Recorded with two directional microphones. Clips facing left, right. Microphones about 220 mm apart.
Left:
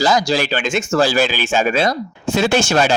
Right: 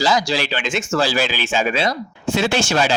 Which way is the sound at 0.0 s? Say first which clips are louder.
Left 3 dB; 45° left (ahead or behind).